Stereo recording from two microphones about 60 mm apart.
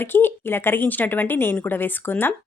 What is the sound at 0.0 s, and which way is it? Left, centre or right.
Speech, left.